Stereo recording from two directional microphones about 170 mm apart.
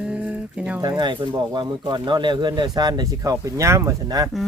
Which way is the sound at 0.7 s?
25° right (ahead or behind).